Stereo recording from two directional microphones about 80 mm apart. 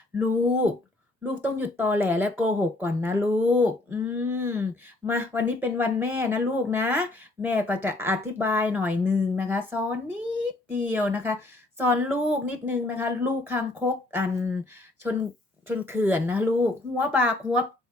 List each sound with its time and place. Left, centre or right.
0.2 s speech: right